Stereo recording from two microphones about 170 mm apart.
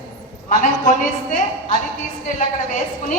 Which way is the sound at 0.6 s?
45° left (ahead or behind).